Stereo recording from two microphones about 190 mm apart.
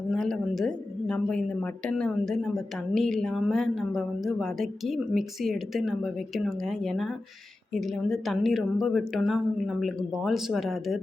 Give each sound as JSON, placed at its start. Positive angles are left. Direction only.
{"t": 0.1, "sound": "speech", "side_deg": 0}